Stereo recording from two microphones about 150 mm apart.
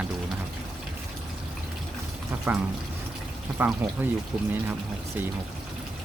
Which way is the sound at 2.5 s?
15° right (ahead or behind).